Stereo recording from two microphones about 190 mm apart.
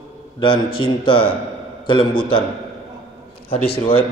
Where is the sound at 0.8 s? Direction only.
25° left (ahead or behind).